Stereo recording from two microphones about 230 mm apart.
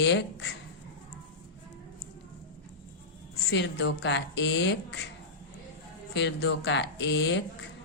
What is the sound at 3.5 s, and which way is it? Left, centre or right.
Speech, left.